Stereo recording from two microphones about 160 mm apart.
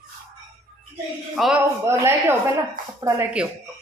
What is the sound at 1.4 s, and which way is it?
Speech, centre (ahead or behind).